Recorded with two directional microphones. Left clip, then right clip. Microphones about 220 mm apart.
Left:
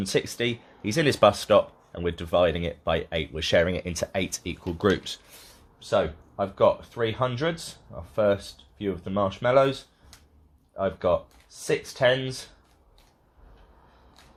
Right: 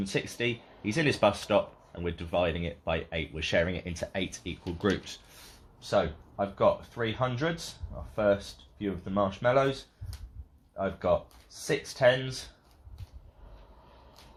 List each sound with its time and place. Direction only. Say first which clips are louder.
0.0 s speech: left 5 dB; 45° left (ahead or behind)
10.8 s speech: left 4 dB; 35° left (ahead or behind)